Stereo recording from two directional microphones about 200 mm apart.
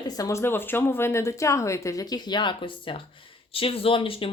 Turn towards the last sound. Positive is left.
turn(degrees=25)  # may be behind; listen again after turning